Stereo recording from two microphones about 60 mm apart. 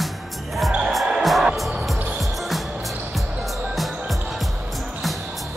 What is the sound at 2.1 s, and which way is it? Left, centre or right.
Music, centre.